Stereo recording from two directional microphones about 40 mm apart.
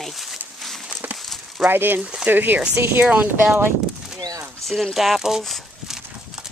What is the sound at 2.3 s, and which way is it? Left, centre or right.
Speech, right.